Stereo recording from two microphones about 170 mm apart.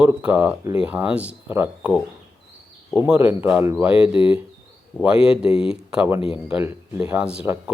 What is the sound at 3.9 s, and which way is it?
Speech, 30° left (ahead or behind).